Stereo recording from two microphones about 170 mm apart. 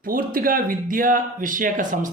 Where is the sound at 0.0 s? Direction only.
55° right (ahead or behind).